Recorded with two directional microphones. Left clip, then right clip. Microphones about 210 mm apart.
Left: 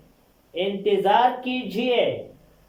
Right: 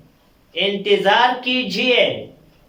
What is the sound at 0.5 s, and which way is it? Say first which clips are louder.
Speech: right 5 dB; 20° left (ahead or behind).